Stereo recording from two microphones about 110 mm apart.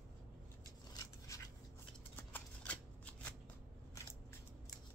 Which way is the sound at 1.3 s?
30° left (ahead or behind).